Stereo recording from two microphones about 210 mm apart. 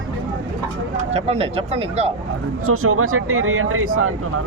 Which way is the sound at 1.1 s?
30° right (ahead or behind).